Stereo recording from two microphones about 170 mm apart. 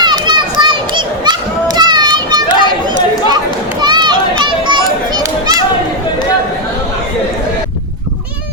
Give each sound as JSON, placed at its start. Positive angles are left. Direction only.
{"t": 0.0, "sound": "children playing", "side_deg": -25}